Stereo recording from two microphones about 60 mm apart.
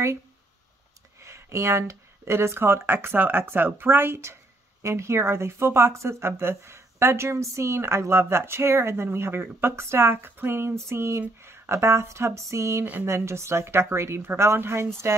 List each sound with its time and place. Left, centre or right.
1.2 s speech: right